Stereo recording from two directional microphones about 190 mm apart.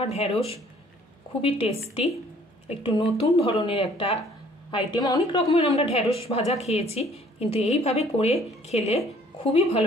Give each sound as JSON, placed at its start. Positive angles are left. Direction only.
{"t": 0.0, "sound": "a woman's voice", "side_deg": 35}
{"t": 2.8, "sound": "a woman's voice", "side_deg": 30}